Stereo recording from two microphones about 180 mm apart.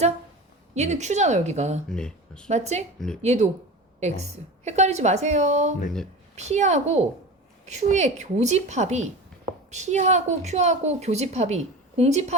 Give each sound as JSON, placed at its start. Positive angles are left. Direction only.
{"t": 0.7, "sound": "a woman's voice", "side_deg": -40}
{"t": 1.9, "sound": "speech", "side_deg": 5}
{"t": 2.5, "sound": "a woman's voice", "side_deg": -40}